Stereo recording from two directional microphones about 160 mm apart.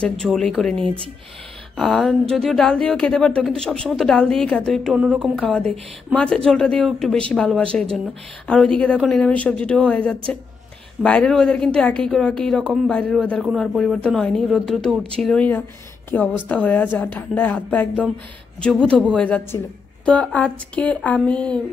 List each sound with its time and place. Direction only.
0.0 s a woman's voice: 5° left (ahead or behind)